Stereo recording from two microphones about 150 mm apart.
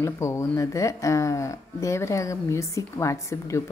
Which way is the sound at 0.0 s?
20° left (ahead or behind).